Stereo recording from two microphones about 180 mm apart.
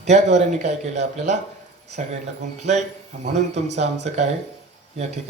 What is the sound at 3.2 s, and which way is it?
A man's voice, 40° right (ahead or behind).